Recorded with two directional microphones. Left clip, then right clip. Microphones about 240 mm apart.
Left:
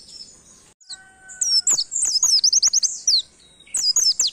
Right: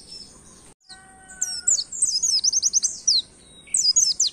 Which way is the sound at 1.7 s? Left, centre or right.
Left.